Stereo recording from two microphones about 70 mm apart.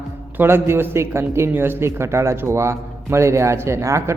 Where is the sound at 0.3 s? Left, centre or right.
Right.